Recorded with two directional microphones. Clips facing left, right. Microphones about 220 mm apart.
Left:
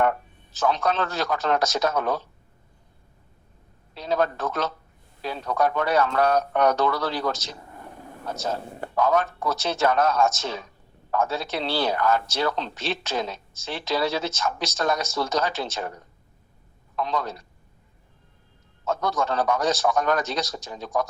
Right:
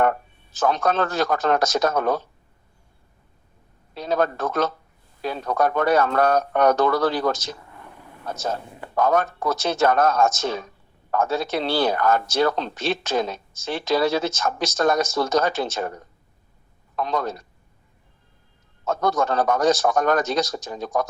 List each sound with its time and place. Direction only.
0.0 s speech: 50° right (ahead or behind)
3.9 s speech: 50° right (ahead or behind)
7.7 s a sound: 40° left (ahead or behind)
9.0 s speech: 50° right (ahead or behind)
18.9 s speech: 50° right (ahead or behind)